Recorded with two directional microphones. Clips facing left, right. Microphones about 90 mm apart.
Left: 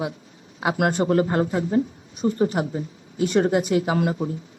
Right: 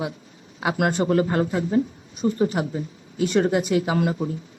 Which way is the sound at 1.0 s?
35° left (ahead or behind).